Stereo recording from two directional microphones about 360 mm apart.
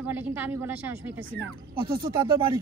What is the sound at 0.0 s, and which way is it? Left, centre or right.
Speech, centre.